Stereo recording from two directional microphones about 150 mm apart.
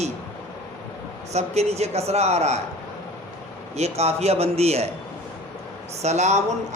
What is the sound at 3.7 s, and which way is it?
A man's voice, 45° right (ahead or behind).